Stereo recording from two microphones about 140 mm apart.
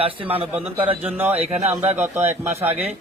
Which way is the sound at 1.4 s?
50° right (ahead or behind).